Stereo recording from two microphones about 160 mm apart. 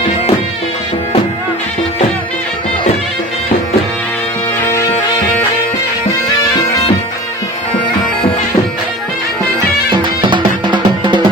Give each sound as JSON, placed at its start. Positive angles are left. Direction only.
{"t": 9.6, "sound": "music", "side_deg": -30}